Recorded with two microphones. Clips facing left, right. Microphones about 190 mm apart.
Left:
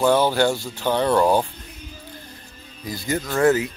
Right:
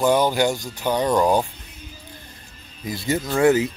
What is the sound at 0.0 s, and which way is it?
Speech, 15° right (ahead or behind).